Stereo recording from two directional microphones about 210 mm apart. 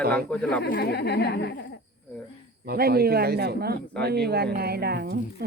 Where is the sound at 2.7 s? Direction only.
45° right (ahead or behind).